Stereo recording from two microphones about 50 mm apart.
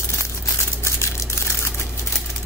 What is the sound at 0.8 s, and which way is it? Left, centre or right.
Crumpling, left.